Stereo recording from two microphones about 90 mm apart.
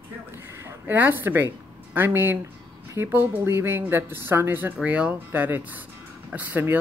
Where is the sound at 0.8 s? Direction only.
20° right (ahead or behind).